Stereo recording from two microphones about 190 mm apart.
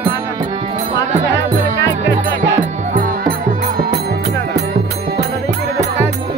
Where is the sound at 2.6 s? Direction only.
45° right (ahead or behind).